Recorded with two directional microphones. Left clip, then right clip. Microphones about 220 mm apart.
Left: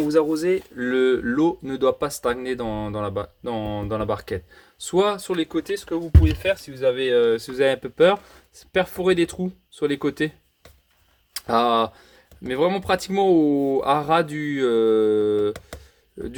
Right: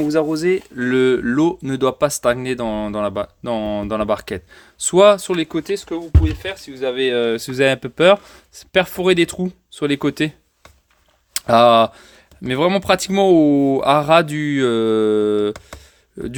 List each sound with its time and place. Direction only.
0.1 s speech: 40° right (ahead or behind)
11.3 s speech: 45° right (ahead or behind)